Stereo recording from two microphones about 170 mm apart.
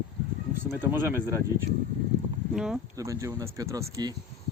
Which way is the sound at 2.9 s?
20° right (ahead or behind).